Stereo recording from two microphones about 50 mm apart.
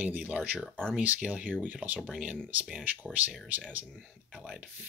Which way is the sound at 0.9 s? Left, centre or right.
Right.